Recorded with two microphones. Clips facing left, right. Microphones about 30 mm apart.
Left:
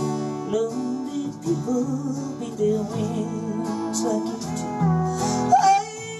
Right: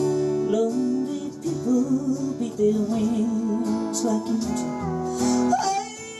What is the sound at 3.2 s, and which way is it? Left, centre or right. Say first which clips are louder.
Music: right 3 dB; centre.